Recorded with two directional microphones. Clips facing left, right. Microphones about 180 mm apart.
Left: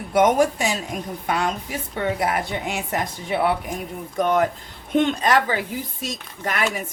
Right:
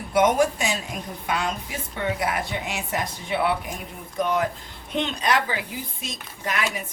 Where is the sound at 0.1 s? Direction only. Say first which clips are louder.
Left 2 dB; 45° left (ahead or behind).